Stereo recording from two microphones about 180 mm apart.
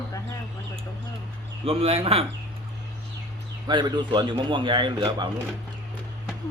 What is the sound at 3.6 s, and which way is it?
Speech, 25° right (ahead or behind).